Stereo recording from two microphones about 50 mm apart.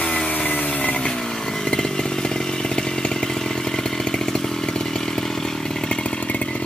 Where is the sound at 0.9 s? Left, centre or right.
Centre.